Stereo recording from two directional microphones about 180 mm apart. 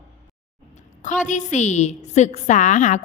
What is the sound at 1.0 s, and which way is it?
A woman's voice, 45° left (ahead or behind).